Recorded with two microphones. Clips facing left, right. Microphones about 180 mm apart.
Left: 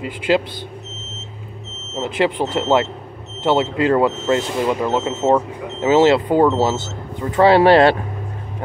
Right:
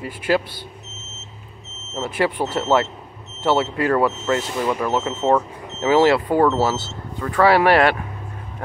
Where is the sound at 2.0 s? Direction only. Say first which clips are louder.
Left 3 dB; 20° left (ahead or behind).